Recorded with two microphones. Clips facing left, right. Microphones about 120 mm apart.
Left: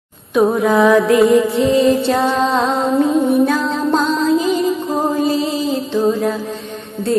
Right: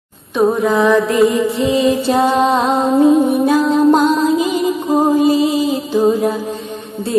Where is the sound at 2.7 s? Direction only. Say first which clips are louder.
Right 3 dB; 30° right (ahead or behind).